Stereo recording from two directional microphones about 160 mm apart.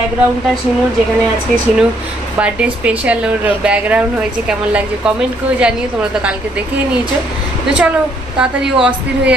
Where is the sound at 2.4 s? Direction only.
10° right (ahead or behind).